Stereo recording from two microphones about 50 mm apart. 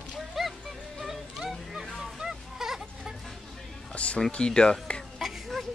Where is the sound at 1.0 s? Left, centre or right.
Centre.